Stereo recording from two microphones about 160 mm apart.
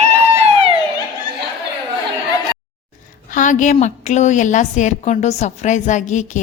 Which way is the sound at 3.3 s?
55° left (ahead or behind).